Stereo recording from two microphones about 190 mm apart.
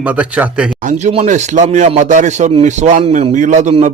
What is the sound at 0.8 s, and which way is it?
Speech, 40° right (ahead or behind).